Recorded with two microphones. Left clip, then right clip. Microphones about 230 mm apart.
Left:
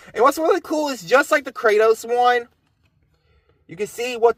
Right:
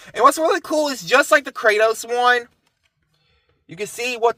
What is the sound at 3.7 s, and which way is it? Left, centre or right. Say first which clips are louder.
Speech: left 1 dB; right.